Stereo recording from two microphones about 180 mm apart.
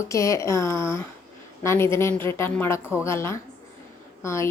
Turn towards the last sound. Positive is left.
turn(degrees=15)  # may be behind; listen again after turning